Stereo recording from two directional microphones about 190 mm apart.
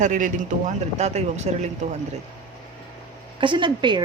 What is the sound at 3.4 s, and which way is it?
Speech, 25° right (ahead or behind).